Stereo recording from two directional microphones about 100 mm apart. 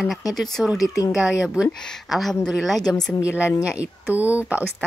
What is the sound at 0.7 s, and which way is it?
Speech, 35° left (ahead or behind).